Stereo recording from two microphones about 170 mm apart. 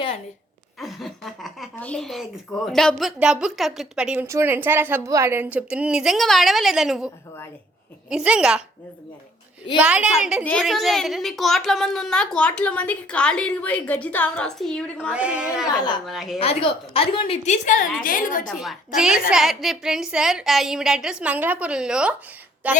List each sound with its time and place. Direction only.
0.8 s a woman's voice: centre (ahead or behind)
8.1 s a woman's voice: 5° right (ahead or behind)
9.7 s a woman's voice: 5° right (ahead or behind)
15.1 s a woman's voice: 5° right (ahead or behind)
15.6 s speech: 25° left (ahead or behind)
16.0 s a woman's voice: centre (ahead or behind)
16.4 s a woman's voice: 35° left (ahead or behind); by 18.4 s 50° left (ahead or behind)
18.4 s a woman's voice: centre (ahead or behind)